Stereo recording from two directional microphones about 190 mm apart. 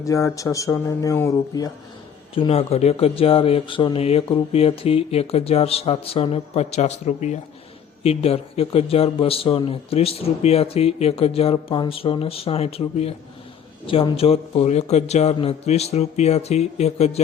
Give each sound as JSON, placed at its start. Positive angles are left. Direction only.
{"t": 0.0, "sound": "speech", "side_deg": 15}
{"t": 2.3, "sound": "speech", "side_deg": 30}